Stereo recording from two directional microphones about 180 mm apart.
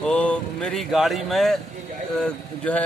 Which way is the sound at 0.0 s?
5° left (ahead or behind).